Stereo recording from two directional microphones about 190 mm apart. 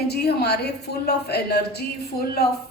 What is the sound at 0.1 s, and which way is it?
A woman's voice, 60° left (ahead or behind).